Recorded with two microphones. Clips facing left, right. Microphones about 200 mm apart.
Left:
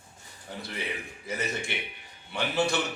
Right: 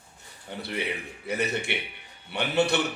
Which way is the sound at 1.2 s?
65° right (ahead or behind).